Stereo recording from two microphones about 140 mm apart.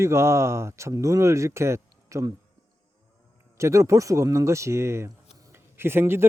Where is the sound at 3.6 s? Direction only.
20° right (ahead or behind).